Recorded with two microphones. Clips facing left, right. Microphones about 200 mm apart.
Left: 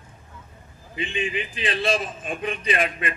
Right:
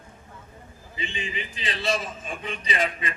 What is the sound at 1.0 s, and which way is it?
A man's voice, 55° left (ahead or behind).